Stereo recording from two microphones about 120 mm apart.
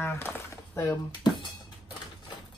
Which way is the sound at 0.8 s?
40° left (ahead or behind).